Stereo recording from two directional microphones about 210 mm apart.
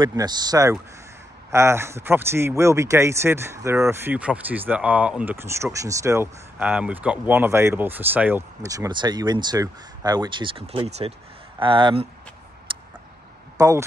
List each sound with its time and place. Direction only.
0.0 s speech: 20° right (ahead or behind)
12.7 s a sound: 25° right (ahead or behind)
13.6 s speech: 15° right (ahead or behind)